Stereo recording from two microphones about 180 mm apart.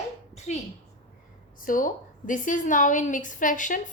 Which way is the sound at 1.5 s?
50° left (ahead or behind).